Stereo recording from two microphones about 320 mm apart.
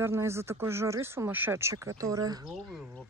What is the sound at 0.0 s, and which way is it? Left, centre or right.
Speech, centre.